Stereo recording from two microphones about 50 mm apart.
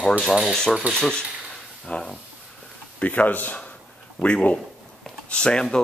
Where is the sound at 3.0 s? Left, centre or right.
Left.